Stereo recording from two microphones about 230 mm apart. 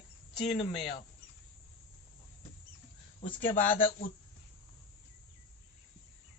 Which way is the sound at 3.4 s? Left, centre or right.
Left.